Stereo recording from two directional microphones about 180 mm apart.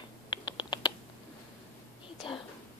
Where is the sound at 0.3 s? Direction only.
25° left (ahead or behind).